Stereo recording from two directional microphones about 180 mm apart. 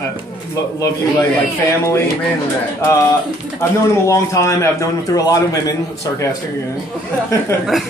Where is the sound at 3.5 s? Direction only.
15° left (ahead or behind).